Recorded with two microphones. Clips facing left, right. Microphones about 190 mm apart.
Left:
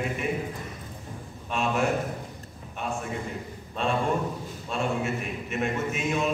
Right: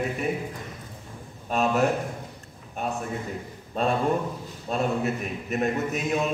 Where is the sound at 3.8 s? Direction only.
40° right (ahead or behind).